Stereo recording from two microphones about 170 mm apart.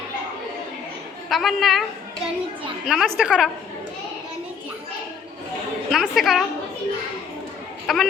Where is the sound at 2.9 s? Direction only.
5° right (ahead or behind).